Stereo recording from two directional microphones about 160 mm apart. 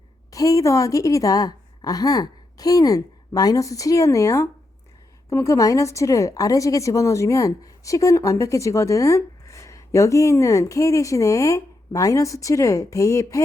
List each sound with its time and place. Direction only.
0.3 s a woman's voice: 20° left (ahead or behind)